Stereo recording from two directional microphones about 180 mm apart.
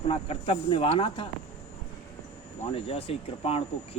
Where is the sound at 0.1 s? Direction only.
30° left (ahead or behind).